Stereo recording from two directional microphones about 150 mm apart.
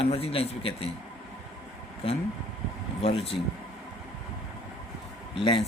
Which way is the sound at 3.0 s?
40° left (ahead or behind).